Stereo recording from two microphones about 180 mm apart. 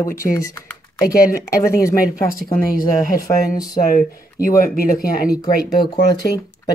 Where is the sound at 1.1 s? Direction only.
15° left (ahead or behind).